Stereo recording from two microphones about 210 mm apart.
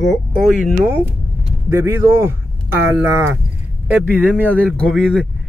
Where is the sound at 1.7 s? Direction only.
10° right (ahead or behind).